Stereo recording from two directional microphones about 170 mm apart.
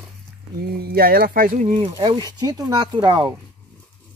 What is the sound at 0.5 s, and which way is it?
Speech, 65° right (ahead or behind).